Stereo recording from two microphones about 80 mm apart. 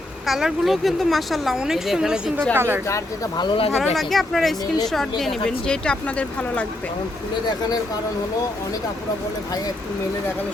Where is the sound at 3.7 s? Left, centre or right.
Centre.